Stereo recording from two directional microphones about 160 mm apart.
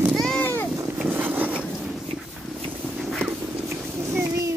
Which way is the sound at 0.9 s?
10° right (ahead or behind).